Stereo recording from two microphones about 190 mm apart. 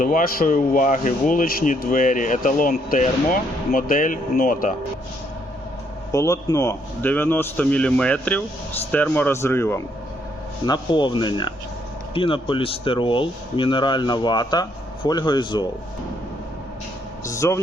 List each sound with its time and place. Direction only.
0.0 s speech: 45° left (ahead or behind)
6.1 s a man's voice: 15° left (ahead or behind)
10.7 s speech: 25° left (ahead or behind)
17.2 s speech: 15° left (ahead or behind)